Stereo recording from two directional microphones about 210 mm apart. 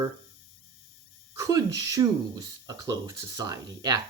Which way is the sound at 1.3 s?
15° right (ahead or behind).